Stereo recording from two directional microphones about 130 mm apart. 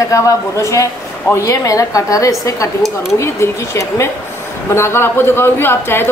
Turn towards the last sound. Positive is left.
turn(degrees=15)  # may be behind; listen again after turning